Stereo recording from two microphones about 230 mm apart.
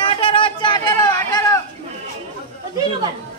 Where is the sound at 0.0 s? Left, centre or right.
Left.